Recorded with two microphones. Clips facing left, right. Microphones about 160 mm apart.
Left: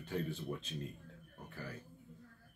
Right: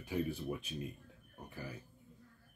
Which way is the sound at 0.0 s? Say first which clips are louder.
Right 3 dB; 10° right (ahead or behind).